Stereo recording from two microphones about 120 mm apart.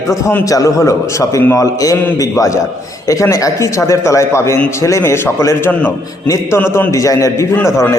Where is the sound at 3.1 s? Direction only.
30° left (ahead or behind).